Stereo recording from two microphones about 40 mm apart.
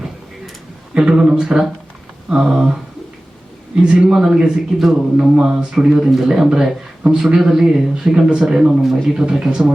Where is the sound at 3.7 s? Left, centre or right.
Right.